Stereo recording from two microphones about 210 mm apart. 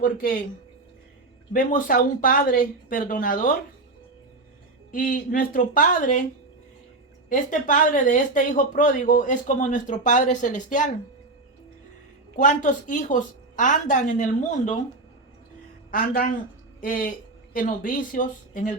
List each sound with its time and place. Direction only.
0.0 s speech: 40° left (ahead or behind)
1.5 s speech: 40° left (ahead or behind)
4.9 s speech: 40° left (ahead or behind)
7.3 s speech: 40° left (ahead or behind)
12.4 s speech: 40° left (ahead or behind)
15.9 s speech: 40° left (ahead or behind)